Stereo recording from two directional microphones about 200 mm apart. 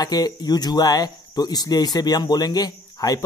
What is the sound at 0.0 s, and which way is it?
Speech, 20° left (ahead or behind).